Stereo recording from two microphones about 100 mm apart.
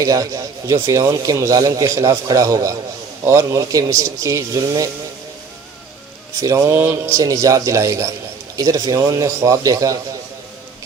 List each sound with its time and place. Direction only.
0.0 s speech: 35° right (ahead or behind)
6.4 s speech: 30° right (ahead or behind)